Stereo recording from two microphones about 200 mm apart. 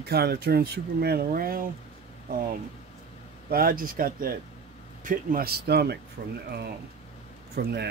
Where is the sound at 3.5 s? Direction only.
50° right (ahead or behind).